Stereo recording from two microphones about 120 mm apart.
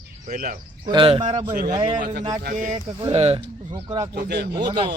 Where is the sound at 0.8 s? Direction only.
45° right (ahead or behind).